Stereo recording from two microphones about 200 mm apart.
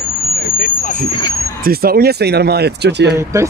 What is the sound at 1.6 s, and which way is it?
Speech, 50° right (ahead or behind).